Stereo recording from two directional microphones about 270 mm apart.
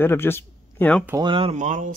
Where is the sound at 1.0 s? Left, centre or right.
Centre; by 1.9 s right.